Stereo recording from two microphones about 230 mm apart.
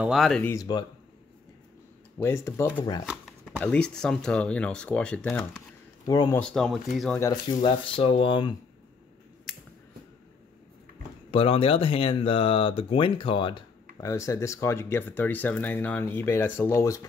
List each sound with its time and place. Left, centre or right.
0.0 s speech: centre
2.2 s speech: centre
6.4 s speech: centre
7.2 s speech: centre
11.2 s speech: left